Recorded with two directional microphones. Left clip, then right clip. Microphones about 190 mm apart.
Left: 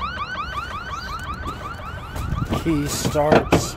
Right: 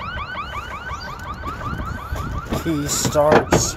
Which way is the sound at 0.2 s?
35° left (ahead or behind).